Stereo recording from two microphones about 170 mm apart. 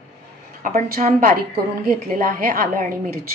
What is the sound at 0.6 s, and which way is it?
Speech, 50° right (ahead or behind).